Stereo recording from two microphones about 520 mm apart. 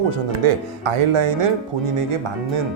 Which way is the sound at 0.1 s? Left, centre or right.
Right.